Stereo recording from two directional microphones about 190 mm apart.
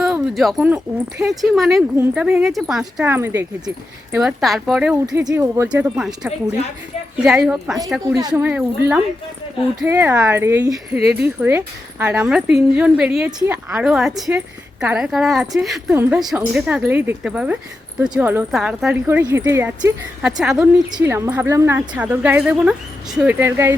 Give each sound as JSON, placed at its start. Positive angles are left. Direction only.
{"t": 0.0, "sound": "a sound", "side_deg": 0}
{"t": 1.5, "sound": "a woman's voice", "side_deg": 0}
{"t": 5.0, "sound": "a woman's voice", "side_deg": -20}
{"t": 8.1, "sound": "a woman's voice", "side_deg": -20}
{"t": 10.7, "sound": "a woman's voice", "side_deg": -5}